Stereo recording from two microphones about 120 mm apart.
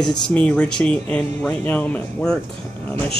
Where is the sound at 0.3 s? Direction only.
10° left (ahead or behind).